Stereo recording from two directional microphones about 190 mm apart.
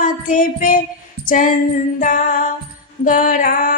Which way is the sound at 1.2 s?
45° left (ahead or behind).